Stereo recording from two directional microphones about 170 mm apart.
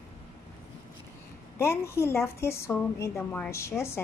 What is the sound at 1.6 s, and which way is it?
A woman's voice, 15° left (ahead or behind).